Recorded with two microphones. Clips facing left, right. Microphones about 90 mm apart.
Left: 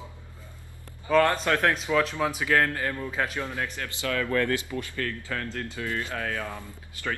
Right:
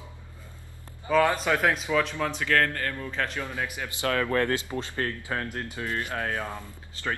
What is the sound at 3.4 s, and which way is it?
Speech, 10° right (ahead or behind).